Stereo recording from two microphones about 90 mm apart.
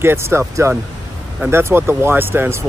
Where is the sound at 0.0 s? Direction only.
30° right (ahead or behind).